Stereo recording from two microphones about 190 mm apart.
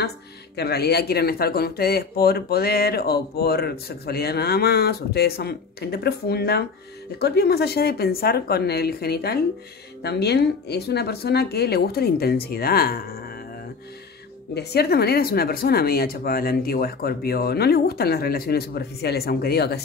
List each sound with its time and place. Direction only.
0.6 s speech: 55° left (ahead or behind)
14.5 s speech: 60° left (ahead or behind)